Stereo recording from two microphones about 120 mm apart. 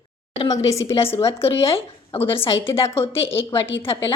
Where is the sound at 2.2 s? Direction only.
50° left (ahead or behind).